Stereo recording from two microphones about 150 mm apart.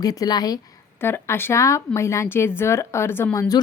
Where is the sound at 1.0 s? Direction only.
15° left (ahead or behind).